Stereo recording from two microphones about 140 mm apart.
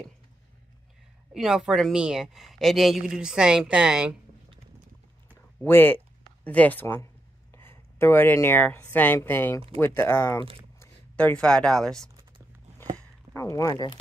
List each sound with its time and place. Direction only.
1.3 s a woman's voice: 5° right (ahead or behind)
5.6 s speech: 15° left (ahead or behind)
13.3 s speech: 20° left (ahead or behind)